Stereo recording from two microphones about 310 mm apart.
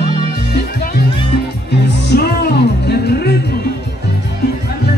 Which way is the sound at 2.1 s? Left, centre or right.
Left.